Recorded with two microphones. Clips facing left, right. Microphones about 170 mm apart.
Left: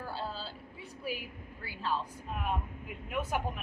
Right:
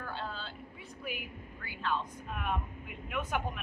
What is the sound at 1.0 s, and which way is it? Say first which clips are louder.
A woman's voice: left 3 dB; 35° left (ahead or behind).